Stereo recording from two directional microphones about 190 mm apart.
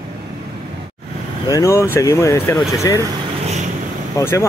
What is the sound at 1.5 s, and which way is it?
Speech, 15° left (ahead or behind).